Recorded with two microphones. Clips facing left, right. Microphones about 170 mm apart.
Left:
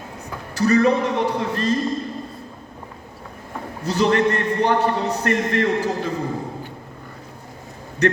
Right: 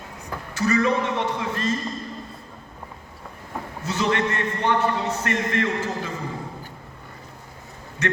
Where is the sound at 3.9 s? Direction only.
35° left (ahead or behind).